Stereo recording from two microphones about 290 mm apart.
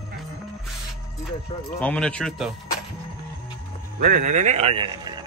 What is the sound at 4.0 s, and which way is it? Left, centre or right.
A man's voice, right.